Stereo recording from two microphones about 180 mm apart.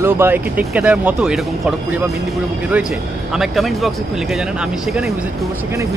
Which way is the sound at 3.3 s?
Centre (ahead or behind).